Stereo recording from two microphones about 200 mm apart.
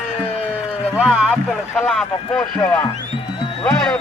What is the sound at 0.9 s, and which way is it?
Speech, 5° right (ahead or behind).